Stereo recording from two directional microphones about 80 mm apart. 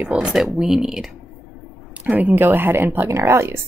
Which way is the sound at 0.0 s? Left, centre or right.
Centre.